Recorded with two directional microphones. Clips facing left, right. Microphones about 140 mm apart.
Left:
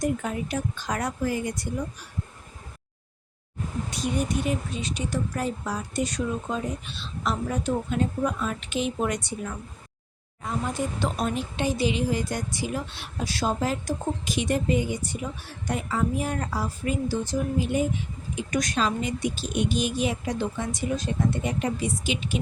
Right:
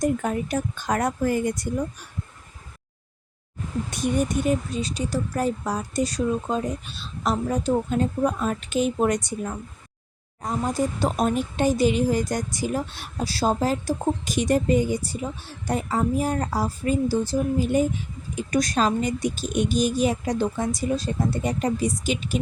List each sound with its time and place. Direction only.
0.0 s speech: 45° right (ahead or behind)
4.0 s speech: 45° right (ahead or behind)